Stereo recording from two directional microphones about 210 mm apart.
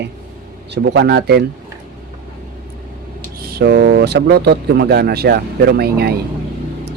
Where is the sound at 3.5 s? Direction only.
45° right (ahead or behind).